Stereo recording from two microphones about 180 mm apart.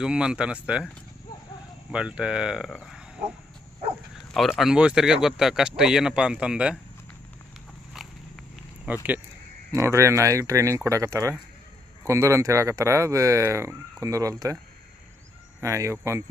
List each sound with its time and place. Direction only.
0.0 s speech: 5° right (ahead or behind)
1.9 s speech: 5° right (ahead or behind)
7.9 s walk: 5° right (ahead or behind)
8.9 s speech: 10° right (ahead or behind)
15.6 s speech: 15° right (ahead or behind)